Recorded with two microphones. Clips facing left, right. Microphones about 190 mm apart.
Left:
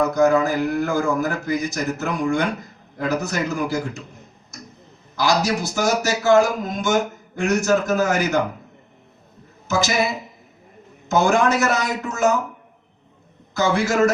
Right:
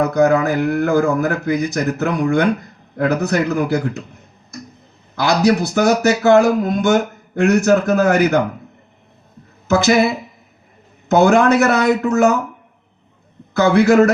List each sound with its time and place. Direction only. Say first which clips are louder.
0.0 s speech: right 3 dB; 60° right (ahead or behind)
5.1 s speech: right 5 dB; 60° right (ahead or behind)
9.6 s speech: right 7 dB; 60° right (ahead or behind)
13.5 s speech: right 8 dB; 65° right (ahead or behind)